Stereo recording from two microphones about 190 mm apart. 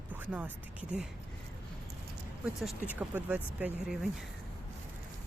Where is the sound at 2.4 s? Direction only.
10° right (ahead or behind).